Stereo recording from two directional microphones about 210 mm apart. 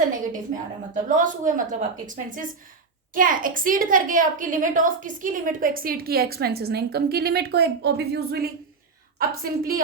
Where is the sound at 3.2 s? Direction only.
40° right (ahead or behind).